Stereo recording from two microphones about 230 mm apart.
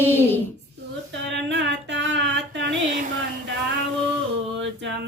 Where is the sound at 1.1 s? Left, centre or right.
Right.